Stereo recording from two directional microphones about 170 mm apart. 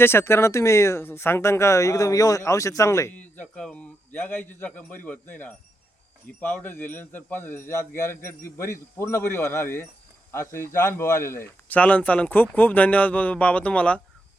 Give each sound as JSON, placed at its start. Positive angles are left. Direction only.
{"t": 0.0, "sound": "speech", "side_deg": 15}